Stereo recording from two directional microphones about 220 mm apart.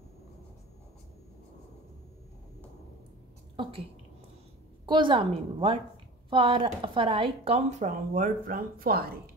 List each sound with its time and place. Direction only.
4.8 s speech: 20° right (ahead or behind); by 9.2 s 45° right (ahead or behind)